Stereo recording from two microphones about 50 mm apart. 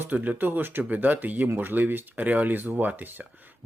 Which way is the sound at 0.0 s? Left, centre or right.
Right.